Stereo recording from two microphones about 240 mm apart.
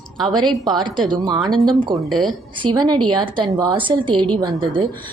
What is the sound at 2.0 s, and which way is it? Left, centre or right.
Speech, centre.